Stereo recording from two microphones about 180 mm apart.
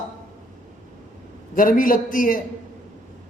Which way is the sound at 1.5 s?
50° left (ahead or behind).